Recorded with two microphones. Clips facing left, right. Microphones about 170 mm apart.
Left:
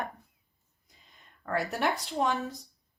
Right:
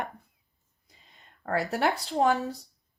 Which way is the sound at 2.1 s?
35° right (ahead or behind).